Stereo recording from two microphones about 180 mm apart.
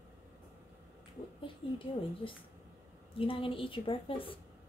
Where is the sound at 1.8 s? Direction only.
30° left (ahead or behind).